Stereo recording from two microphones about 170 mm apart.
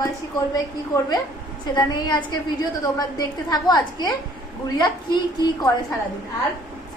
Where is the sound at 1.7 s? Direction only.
25° left (ahead or behind).